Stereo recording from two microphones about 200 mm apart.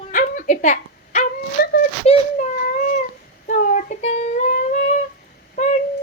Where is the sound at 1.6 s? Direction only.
50° left (ahead or behind).